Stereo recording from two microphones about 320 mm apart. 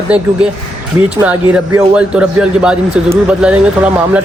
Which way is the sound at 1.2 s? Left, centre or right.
Centre.